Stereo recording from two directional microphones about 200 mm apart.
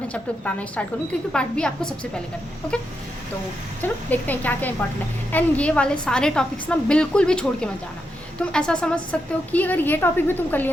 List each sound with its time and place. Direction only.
0.1 s a woman's voice: 5° left (ahead or behind)
3.8 s a woman's voice: 10° left (ahead or behind)